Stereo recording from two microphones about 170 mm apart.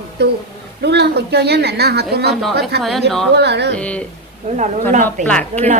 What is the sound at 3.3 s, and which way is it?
Speech, 85° right.